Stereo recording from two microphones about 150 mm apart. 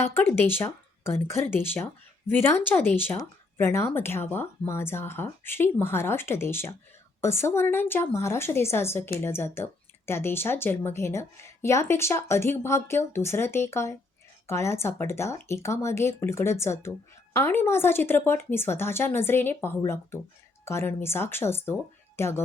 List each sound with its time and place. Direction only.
0.0 s speech: 15° left (ahead or behind)